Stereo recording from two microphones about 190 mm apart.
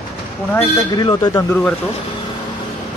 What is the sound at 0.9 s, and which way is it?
Speech, 20° left (ahead or behind).